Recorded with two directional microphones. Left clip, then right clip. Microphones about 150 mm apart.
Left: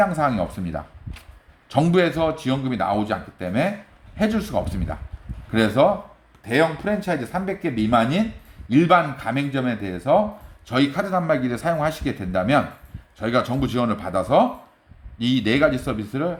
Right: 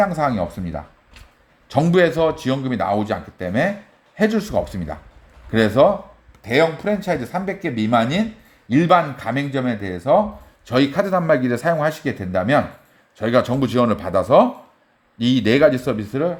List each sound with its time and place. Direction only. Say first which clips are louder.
0.0 s speech: right 1 dB; 35° right (ahead or behind)
1.7 s a man's voice: right 3 dB; 40° right (ahead or behind)
10.7 s a man's voice: right 4 dB; 60° right (ahead or behind); by 12.6 s 40° right (ahead or behind)
13.1 s speech: right 4 dB; 55° right (ahead or behind)